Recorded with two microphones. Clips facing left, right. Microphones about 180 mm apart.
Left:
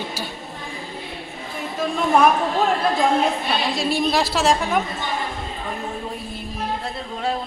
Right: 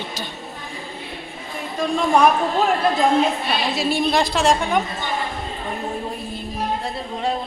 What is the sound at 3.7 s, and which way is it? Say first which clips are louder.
Speech: right 2 dB; centre (ahead or behind).